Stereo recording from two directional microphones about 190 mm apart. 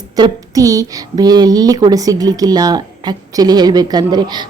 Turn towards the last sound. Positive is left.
turn(degrees=-20)  # may be behind; listen again after turning